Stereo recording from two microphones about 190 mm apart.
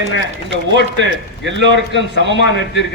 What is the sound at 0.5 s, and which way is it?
Speech, 65° right (ahead or behind).